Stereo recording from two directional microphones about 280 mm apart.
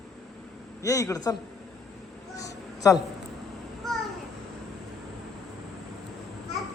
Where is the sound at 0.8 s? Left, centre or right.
Centre.